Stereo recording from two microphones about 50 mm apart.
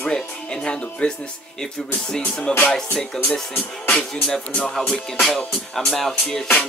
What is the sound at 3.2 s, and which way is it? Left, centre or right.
Music, centre.